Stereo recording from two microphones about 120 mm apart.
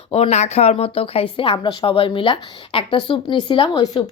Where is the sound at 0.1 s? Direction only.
65° left (ahead or behind).